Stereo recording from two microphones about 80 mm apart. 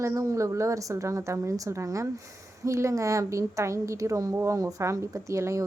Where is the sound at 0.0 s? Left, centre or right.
Right.